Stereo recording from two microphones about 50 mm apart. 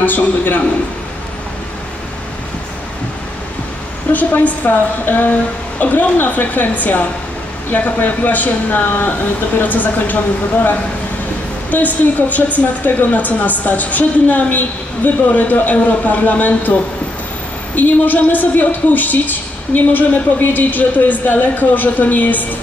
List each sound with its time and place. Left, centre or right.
0.0 s a woman's voice: left
4.1 s a woman's voice: left
17.7 s a woman's voice: left